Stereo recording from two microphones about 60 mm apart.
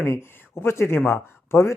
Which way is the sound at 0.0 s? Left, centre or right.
Left.